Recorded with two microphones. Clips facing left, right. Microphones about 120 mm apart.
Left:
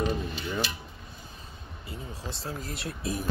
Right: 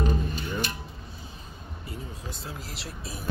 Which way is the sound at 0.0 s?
45° right (ahead or behind).